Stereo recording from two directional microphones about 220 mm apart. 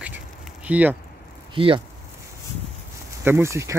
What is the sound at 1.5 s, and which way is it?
Speech, 25° right (ahead or behind).